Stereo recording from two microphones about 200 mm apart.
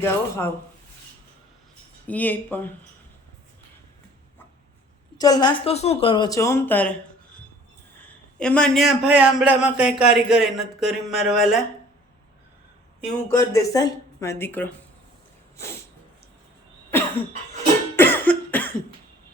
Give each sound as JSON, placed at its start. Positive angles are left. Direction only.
{"t": 0.0, "sound": "speech", "side_deg": 10}
{"t": 2.0, "sound": "speech", "side_deg": 10}
{"t": 5.1, "sound": "speech", "side_deg": 20}
{"t": 7.9, "sound": "a man's voice", "side_deg": 5}
{"t": 13.3, "sound": "speech", "side_deg": 15}
{"t": 17.9, "sound": "cough", "side_deg": 10}